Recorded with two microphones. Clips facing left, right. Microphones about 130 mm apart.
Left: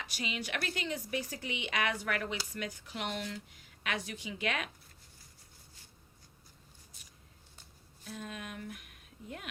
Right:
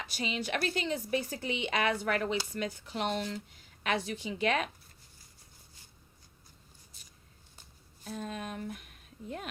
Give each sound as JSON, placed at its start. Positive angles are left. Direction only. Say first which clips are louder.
{"t": 0.0, "sound": "speech", "louder": "right 4 dB", "side_deg": -30}
{"t": 6.9, "sound": "a sound", "louder": "even", "side_deg": -30}
{"t": 8.0, "sound": "speech", "louder": "right 5 dB", "side_deg": -35}